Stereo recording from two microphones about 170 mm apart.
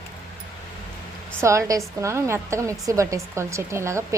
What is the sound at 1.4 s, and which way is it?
Speech, 15° right (ahead or behind).